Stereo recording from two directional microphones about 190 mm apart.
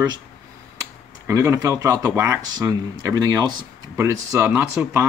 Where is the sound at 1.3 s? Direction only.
15° right (ahead or behind).